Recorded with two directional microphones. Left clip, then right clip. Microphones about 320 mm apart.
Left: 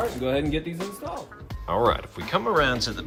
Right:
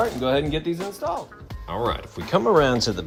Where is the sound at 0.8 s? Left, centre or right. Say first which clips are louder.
Right 6 dB; centre.